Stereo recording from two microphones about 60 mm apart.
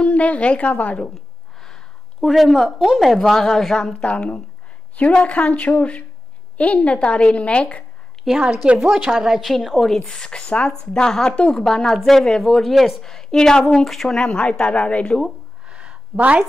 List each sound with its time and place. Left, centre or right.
0.0 s a woman's voice: left
1.1 s a sound: centre
2.2 s a woman's voice: centre
3.2 s a woman's voice: centre
8.3 s a woman's voice: centre
9.2 s a woman's voice: centre
9.9 s a woman's voice: centre
15.6 s a sound: centre